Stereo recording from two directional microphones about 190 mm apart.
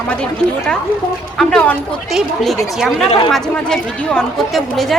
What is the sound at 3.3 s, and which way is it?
A woman's voice, 5° left (ahead or behind).